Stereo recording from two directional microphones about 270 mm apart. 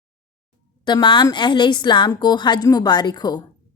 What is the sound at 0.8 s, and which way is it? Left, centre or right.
A woman's voice, centre.